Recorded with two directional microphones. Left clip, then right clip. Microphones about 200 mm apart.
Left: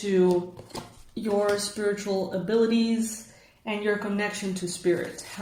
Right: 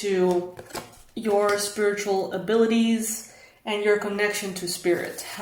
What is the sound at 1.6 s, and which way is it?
Speech, 35° right (ahead or behind).